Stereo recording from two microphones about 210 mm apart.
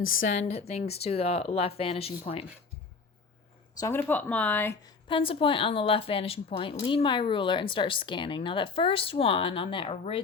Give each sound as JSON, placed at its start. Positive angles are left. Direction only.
{"t": 0.2, "sound": "a woman's voice", "side_deg": 35}
{"t": 3.8, "sound": "speech", "side_deg": 10}
{"t": 5.0, "sound": "a woman's voice", "side_deg": 25}